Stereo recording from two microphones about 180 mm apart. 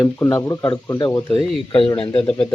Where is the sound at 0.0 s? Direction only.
15° left (ahead or behind).